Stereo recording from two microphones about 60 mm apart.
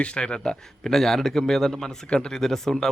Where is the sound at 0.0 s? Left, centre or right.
Centre.